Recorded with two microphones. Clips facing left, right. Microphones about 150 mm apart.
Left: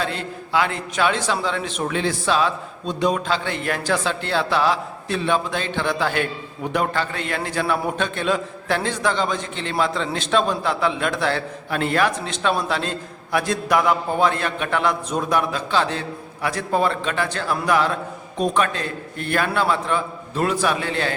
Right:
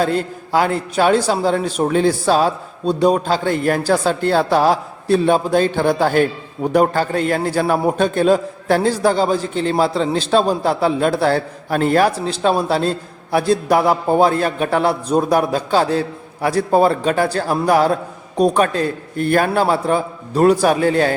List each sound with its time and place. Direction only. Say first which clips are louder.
0.0 s a man's voice: right 8 dB; 40° right (ahead or behind)